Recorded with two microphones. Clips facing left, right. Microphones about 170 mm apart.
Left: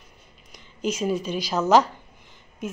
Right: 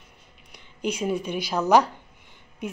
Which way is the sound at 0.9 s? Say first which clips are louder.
Left 1 dB; 15° right (ahead or behind).